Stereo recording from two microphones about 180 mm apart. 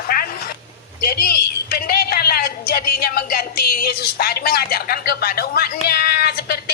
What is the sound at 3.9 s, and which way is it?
A man's voice, 60° left (ahead or behind).